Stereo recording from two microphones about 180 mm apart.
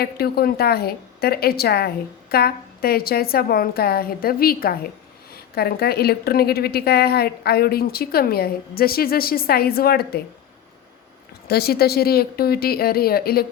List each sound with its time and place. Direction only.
0.0 s a woman's voice: 60° left (ahead or behind)
11.4 s a woman's voice: 60° left (ahead or behind)